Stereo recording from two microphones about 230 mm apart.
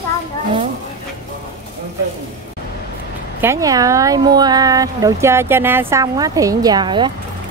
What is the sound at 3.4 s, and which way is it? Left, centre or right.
A woman's voice, centre.